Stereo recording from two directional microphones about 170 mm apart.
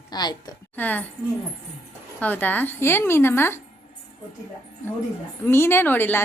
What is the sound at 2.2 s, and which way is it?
Speech, 10° left (ahead or behind).